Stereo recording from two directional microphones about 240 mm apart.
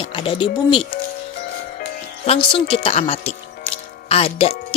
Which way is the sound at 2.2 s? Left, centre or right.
Left.